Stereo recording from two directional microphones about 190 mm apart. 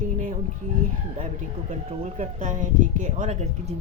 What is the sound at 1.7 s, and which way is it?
Speech, 40° right (ahead or behind).